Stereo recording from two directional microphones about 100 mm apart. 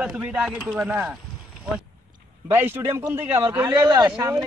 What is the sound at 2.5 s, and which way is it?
Speech, 20° right (ahead or behind).